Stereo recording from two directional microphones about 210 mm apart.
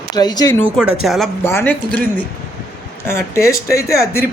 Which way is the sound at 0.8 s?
5° right (ahead or behind).